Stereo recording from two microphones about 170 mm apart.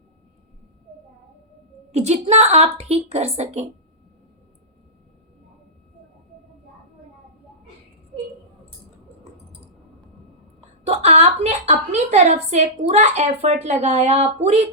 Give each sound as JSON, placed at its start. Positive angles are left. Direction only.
{"t": 1.9, "sound": "a woman's voice", "side_deg": -40}
{"t": 10.8, "sound": "a woman's voice", "side_deg": -40}